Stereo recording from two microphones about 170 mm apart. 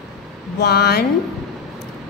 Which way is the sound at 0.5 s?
75° left (ahead or behind).